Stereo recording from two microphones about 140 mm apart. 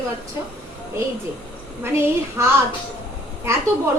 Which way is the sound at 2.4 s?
20° right (ahead or behind).